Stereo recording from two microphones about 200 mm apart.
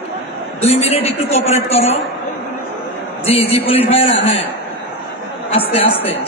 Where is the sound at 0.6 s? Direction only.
30° left (ahead or behind).